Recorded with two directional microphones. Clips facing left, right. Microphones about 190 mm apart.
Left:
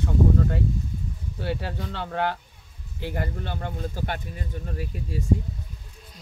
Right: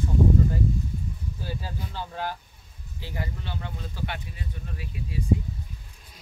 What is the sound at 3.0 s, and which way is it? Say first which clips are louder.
Speech: left 5 dB; 55° left (ahead or behind).